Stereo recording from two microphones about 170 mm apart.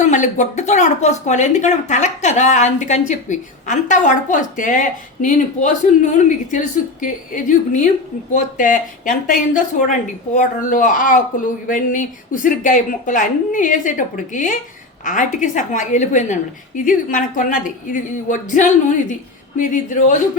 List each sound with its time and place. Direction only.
0.0 s a woman's voice: 45° left (ahead or behind)